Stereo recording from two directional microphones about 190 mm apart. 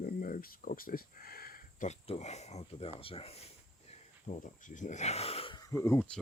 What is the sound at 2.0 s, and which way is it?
Speech, 35° left (ahead or behind).